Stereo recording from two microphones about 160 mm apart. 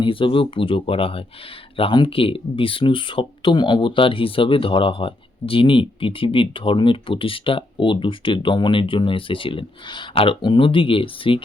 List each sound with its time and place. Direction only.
0.0 s speech: 30° left (ahead or behind)